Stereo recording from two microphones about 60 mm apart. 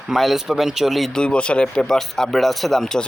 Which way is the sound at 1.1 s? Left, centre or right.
Centre.